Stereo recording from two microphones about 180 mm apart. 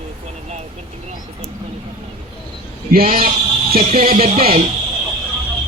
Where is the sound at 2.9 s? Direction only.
50° right (ahead or behind).